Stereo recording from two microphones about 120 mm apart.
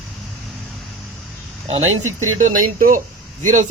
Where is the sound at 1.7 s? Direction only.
80° right.